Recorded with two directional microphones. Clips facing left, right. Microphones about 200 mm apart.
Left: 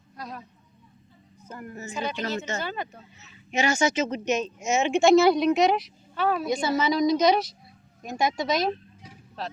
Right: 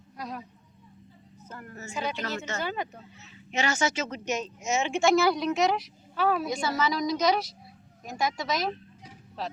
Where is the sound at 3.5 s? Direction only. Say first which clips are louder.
Left 4 dB; 10° left (ahead or behind).